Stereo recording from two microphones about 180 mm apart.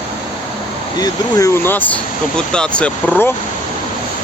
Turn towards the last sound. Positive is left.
turn(degrees=10)  # may be behind; listen again after turning